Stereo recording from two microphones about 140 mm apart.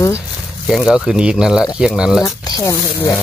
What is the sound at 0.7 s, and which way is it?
Speech, 5° right (ahead or behind).